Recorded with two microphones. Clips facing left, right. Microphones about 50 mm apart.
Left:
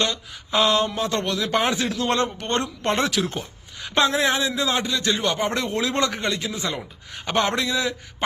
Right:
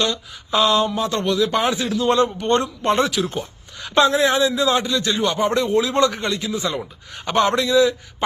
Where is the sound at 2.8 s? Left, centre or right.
Right.